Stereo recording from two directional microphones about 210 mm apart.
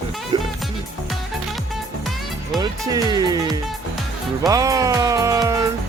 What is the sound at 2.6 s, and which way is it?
Speech, 15° right (ahead or behind).